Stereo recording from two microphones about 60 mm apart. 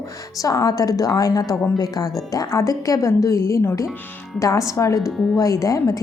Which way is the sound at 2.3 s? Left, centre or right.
Left.